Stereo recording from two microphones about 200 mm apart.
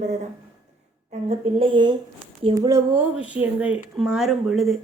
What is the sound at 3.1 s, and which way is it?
Speech, 5° right (ahead or behind).